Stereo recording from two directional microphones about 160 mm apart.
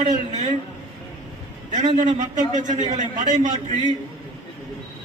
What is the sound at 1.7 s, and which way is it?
A man's voice, 50° right (ahead or behind).